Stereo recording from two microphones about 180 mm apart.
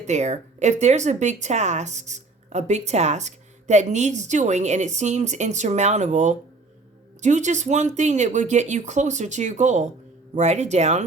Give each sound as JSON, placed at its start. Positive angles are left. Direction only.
{"t": 0.0, "sound": "speech", "side_deg": -40}